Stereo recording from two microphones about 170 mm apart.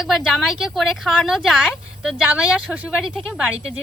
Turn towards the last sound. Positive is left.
turn(degrees=-5)  # may be behind; listen again after turning